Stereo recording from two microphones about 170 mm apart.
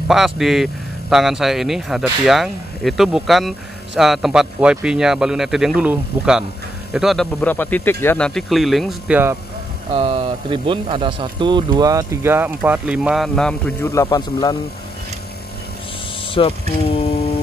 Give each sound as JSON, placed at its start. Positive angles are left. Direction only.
{"t": 0.1, "sound": "speech", "side_deg": 0}
{"t": 8.4, "sound": "speech", "side_deg": 0}
{"t": 9.9, "sound": "a man's voice", "side_deg": -35}
{"t": 16.3, "sound": "vehicle", "side_deg": 35}